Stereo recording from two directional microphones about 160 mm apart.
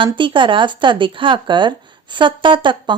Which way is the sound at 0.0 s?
30° right (ahead or behind).